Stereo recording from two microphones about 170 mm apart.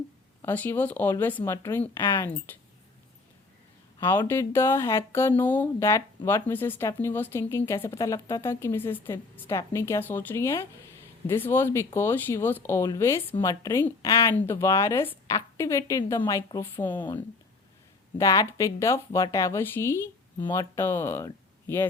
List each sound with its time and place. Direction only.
0.4 s speech: 10° left (ahead or behind)
4.0 s a woman's voice: 15° left (ahead or behind)
18.2 s speech: 20° left (ahead or behind)